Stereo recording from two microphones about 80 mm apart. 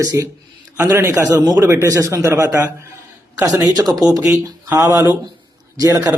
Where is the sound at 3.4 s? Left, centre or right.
Right.